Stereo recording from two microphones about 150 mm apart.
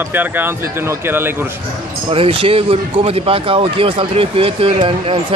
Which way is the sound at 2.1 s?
35° right (ahead or behind).